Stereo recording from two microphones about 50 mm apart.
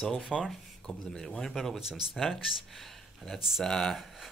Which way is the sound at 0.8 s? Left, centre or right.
Centre.